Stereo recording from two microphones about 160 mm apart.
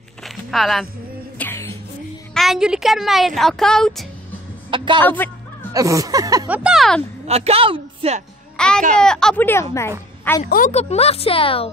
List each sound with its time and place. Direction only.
0.2 s a sound: centre (ahead or behind)
1.4 s music: 15° left (ahead or behind)
2.3 s a woman's voice: centre (ahead or behind)
4.6 s a man's voice: 30° right (ahead or behind)
5.0 s speech: 10° left (ahead or behind)
5.7 s speech: 20° right (ahead or behind)
6.5 s a woman's voice: 5° right (ahead or behind)
7.2 s a woman's voice: 40° right (ahead or behind)
8.5 s a woman's voice: 5° left (ahead or behind)
10.4 s speech: 55° left (ahead or behind)
10.7 s speech: 40° left (ahead or behind)